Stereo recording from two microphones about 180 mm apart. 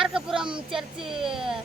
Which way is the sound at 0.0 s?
5° right (ahead or behind).